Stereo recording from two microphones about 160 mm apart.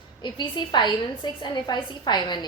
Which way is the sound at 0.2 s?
30° left (ahead or behind).